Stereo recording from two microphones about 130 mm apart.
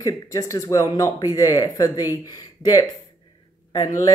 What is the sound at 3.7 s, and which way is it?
Speech, 25° left (ahead or behind).